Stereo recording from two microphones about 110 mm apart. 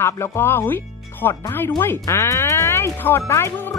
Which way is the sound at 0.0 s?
20° left (ahead or behind).